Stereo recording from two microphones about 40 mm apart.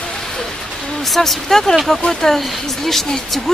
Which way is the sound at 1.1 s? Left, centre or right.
Centre.